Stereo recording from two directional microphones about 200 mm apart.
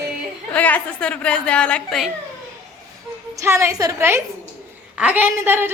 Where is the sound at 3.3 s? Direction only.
15° right (ahead or behind).